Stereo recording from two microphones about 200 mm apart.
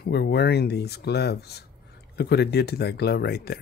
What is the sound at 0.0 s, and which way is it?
Speech, 55° left (ahead or behind).